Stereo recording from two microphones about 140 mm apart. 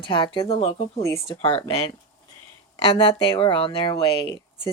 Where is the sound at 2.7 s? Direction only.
40° left (ahead or behind).